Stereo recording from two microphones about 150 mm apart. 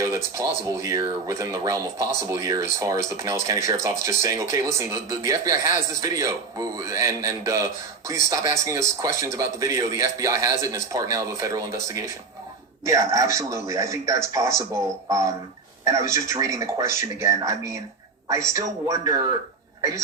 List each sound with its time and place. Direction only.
0.3 s speech: 20° right (ahead or behind)